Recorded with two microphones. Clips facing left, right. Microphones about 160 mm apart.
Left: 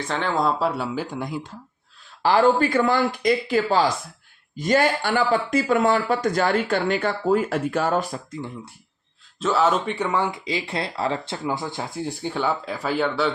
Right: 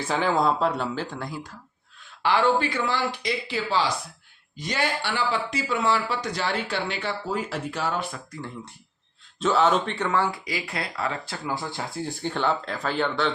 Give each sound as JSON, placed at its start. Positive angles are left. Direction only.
{"t": 0.0, "sound": "speech", "side_deg": -5}
{"t": 2.2, "sound": "speech", "side_deg": 40}
{"t": 8.3, "sound": "speech", "side_deg": 15}
{"t": 9.4, "sound": "speech", "side_deg": 0}